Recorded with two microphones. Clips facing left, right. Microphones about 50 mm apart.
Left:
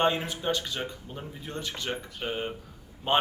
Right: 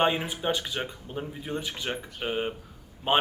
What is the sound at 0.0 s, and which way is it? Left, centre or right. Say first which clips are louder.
Speech: right 1 dB; centre.